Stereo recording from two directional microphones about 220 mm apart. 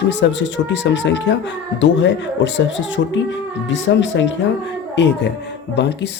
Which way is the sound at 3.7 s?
55° left (ahead or behind).